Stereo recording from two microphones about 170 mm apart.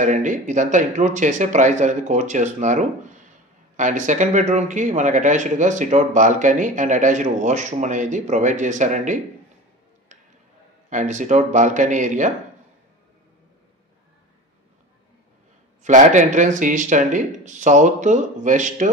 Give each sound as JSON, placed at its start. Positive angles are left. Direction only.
{"t": 0.0, "sound": "speech", "side_deg": -50}
{"t": 10.9, "sound": "speech", "side_deg": -45}
{"t": 15.8, "sound": "speech", "side_deg": -45}